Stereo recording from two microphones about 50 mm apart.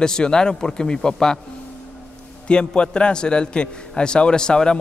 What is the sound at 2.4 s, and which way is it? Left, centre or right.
A man's voice, left.